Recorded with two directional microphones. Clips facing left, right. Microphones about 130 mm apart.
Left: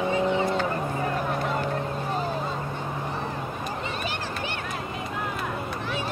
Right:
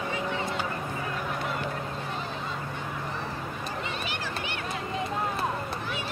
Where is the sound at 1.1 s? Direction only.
40° left (ahead or behind).